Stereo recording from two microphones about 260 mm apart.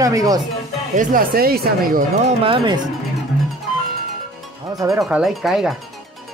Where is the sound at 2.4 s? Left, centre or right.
Centre.